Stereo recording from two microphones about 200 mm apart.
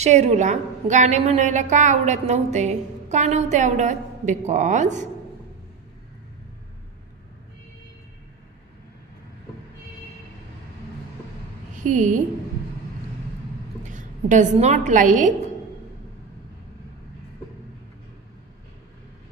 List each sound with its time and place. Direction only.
0.0 s a woman's voice: 35° right (ahead or behind)
11.7 s a woman's voice: 40° right (ahead or behind)
13.8 s a woman's voice: 40° right (ahead or behind)